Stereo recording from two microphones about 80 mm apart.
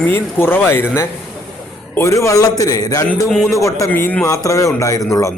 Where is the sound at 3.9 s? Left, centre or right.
Left.